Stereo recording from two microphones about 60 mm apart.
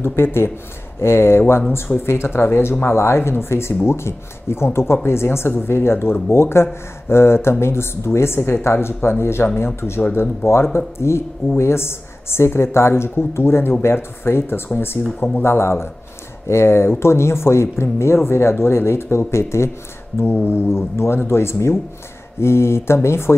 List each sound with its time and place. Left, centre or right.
0.0 s speech: left